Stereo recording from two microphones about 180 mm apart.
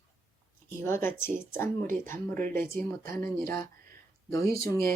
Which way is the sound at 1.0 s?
15° left (ahead or behind).